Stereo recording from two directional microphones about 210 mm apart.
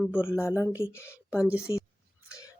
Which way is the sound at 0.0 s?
10° left (ahead or behind).